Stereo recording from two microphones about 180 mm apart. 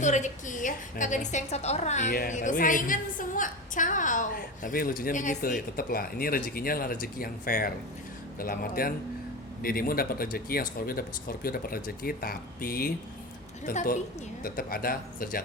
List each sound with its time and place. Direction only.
0.0 s a woman's voice: 40° left (ahead or behind)